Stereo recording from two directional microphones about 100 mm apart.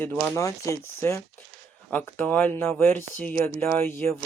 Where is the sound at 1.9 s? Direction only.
15° left (ahead or behind).